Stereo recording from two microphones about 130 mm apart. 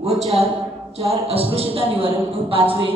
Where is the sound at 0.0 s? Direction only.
55° right (ahead or behind).